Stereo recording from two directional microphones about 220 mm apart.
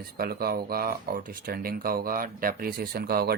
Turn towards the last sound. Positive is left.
turn(degrees=-45)  # may be behind; listen again after turning